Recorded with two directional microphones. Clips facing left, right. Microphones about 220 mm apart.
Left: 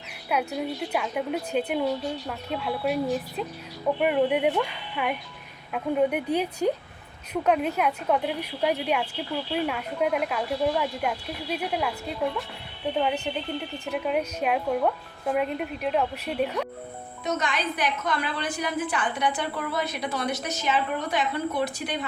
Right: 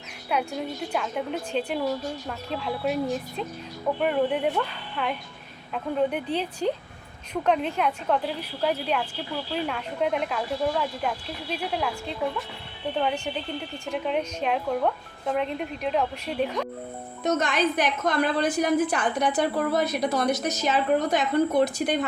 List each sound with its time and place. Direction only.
0.3 s a woman's voice: 5° left (ahead or behind)
4.0 s a woman's voice: 10° left (ahead or behind)
13.9 s speech: 5° left (ahead or behind)
17.2 s a woman's voice: 45° right (ahead or behind)